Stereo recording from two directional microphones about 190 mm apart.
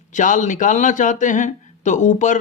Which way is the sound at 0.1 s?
40° left (ahead or behind).